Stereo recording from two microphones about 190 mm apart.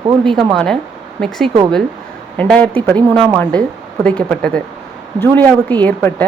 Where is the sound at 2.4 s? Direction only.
5° left (ahead or behind).